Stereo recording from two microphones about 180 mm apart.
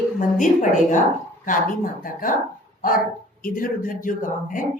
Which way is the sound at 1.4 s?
50° left (ahead or behind).